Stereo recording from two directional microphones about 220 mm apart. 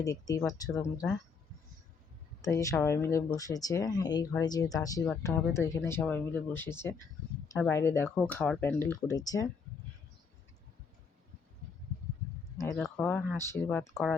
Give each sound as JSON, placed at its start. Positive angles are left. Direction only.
{"t": 0.0, "sound": "speech", "side_deg": 15}
{"t": 2.4, "sound": "speech", "side_deg": 15}
{"t": 12.7, "sound": "speech", "side_deg": 0}